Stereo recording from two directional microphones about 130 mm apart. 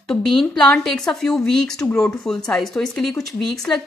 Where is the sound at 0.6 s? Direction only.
5° left (ahead or behind).